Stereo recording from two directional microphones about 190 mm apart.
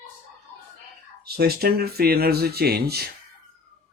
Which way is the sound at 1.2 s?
55° right (ahead or behind).